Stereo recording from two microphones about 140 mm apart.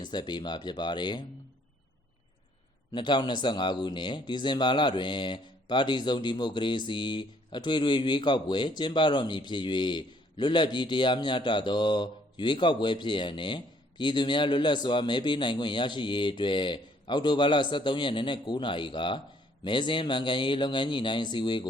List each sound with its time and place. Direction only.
0.0 s speech: 30° left (ahead or behind)
2.9 s speech: 35° left (ahead or behind)